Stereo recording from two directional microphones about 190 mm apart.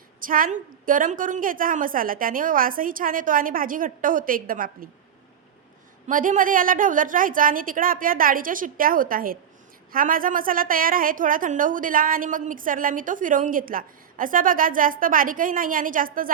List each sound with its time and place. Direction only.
0.2 s a woman's voice: 45° right (ahead or behind)
6.1 s a woman's voice: 45° right (ahead or behind)